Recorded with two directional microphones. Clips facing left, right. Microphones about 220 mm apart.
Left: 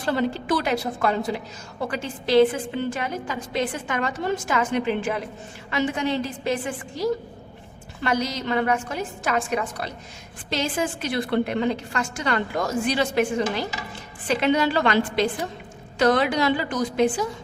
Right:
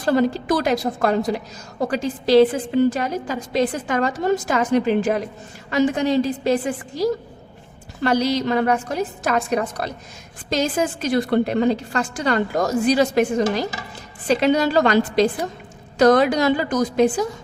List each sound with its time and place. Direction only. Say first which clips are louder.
0.0 s a woman's voice: right 6 dB; 40° right (ahead or behind)